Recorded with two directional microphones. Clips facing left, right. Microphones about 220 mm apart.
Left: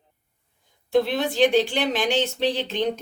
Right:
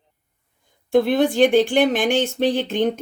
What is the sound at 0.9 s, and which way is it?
Speech, 50° right (ahead or behind).